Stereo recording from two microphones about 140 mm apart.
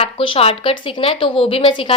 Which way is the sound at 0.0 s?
40° left (ahead or behind).